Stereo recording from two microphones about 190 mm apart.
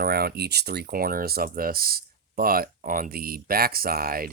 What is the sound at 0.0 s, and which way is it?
Speech, 55° right (ahead or behind).